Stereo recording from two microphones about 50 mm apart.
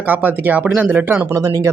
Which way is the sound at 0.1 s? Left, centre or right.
Right.